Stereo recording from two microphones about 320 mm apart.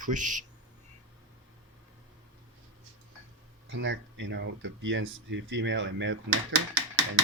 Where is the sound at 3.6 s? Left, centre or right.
Right.